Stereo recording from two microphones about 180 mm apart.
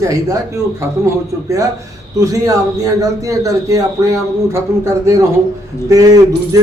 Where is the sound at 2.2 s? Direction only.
20° right (ahead or behind).